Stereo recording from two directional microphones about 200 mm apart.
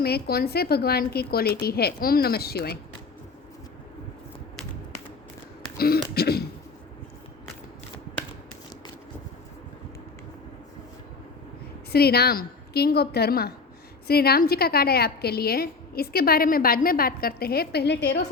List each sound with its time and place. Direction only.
0.0 s a woman's voice: 50° left (ahead or behind)
5.7 s speech: 50° left (ahead or behind)
11.9 s a woman's voice: 50° left (ahead or behind)